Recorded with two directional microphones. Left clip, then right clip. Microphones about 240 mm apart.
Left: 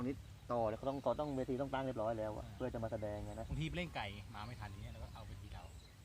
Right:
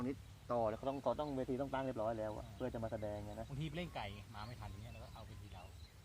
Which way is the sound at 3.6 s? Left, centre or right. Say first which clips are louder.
Left 3 dB; centre.